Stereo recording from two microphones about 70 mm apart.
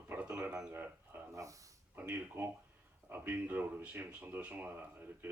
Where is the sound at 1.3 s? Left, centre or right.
Right.